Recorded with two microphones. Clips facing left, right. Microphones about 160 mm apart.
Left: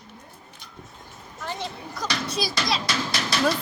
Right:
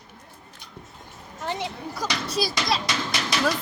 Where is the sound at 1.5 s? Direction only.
15° right (ahead or behind).